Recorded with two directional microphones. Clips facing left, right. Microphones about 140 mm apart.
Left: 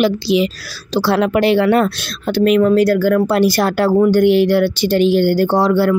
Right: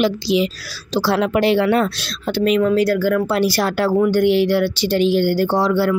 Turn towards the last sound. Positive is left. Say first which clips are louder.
# left 3 dB
turn(degrees=50)  # may be behind; listen again after turning